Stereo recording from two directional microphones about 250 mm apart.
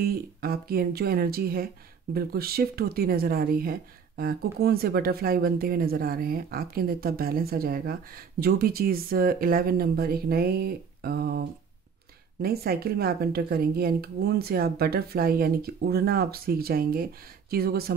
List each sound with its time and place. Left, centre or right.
0.0 s speech: right